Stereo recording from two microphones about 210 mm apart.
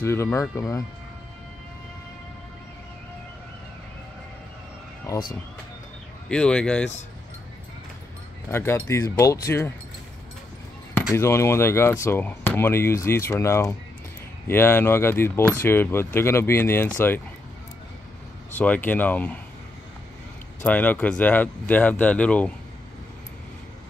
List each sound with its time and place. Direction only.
0.0 s speech: 10° left (ahead or behind)
6.2 s speech: 5° left (ahead or behind)
8.5 s speech: 10° left (ahead or behind)
11.1 s speech: 10° left (ahead or behind)
18.5 s speech: 10° left (ahead or behind)
20.6 s speech: 10° left (ahead or behind)